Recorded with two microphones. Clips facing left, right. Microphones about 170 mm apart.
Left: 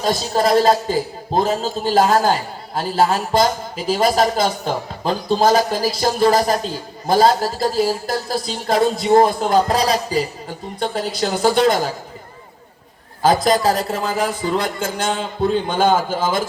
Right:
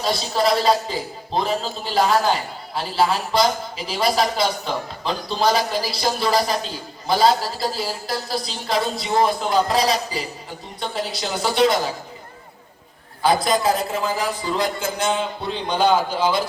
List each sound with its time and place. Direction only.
0.0 s a man's voice: 45° left (ahead or behind)
13.2 s a man's voice: 40° left (ahead or behind)